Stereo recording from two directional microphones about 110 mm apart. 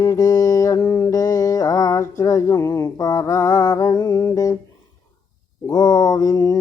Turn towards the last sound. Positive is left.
turn(degrees=35)  # may be behind; listen again after turning